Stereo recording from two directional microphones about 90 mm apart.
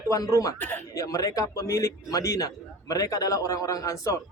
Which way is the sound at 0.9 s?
40° left (ahead or behind).